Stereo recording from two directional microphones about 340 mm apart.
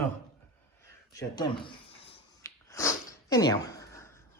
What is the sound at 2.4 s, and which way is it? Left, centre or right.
Sneeze, centre.